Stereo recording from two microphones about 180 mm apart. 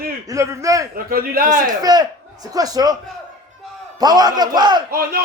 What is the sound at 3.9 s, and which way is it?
A man's voice, 20° right (ahead or behind).